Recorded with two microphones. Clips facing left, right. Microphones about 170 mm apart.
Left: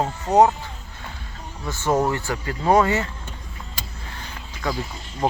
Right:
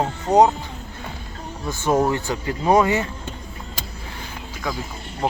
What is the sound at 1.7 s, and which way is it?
Speech, 15° right (ahead or behind).